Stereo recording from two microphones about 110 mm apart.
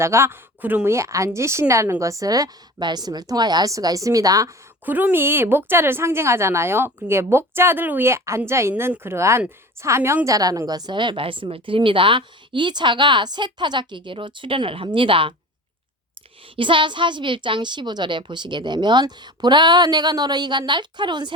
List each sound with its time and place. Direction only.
0.0 s speech: 25° right (ahead or behind)
4.9 s a woman's voice: 15° right (ahead or behind); by 15.4 s 50° right (ahead or behind)
16.6 s a woman's voice: 50° right (ahead or behind)